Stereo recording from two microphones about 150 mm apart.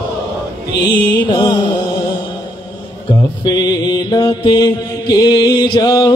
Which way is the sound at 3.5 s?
30° left (ahead or behind).